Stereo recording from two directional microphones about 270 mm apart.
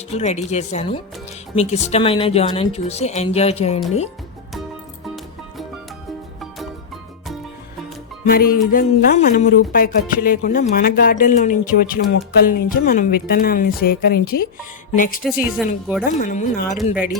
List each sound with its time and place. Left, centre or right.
0.1 s speech: left
8.2 s speech: left
15.2 s speech: centre
16.1 s speech: left